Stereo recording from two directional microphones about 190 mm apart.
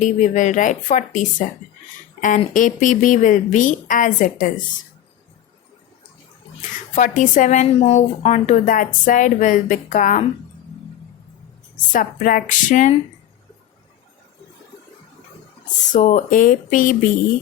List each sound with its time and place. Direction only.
0.0 s a woman's voice: 40° left (ahead or behind)
6.9 s a woman's voice: 40° left (ahead or behind)
11.9 s a woman's voice: 45° left (ahead or behind)
15.9 s a woman's voice: 40° left (ahead or behind)